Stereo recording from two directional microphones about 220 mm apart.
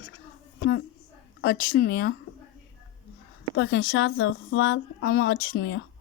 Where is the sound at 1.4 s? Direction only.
45° left (ahead or behind).